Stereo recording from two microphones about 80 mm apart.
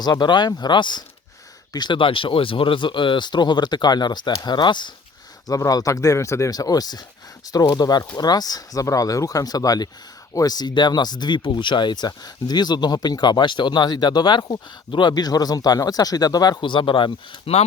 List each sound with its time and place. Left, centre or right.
0.0 s speech: left
5.5 s speech: left
6.5 s speech: left
16.6 s speech: left